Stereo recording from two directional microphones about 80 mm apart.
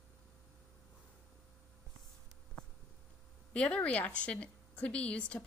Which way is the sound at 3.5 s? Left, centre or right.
Centre.